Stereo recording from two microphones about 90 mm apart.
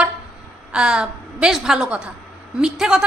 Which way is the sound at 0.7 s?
10° right (ahead or behind).